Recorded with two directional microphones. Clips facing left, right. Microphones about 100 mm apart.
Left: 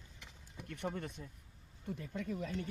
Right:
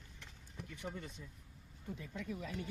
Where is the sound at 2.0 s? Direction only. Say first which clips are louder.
Left 4 dB; 50° left (ahead or behind).